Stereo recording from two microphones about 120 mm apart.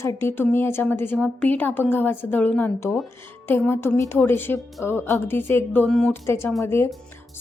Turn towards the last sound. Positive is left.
turn(degrees=20)  # may be behind; listen again after turning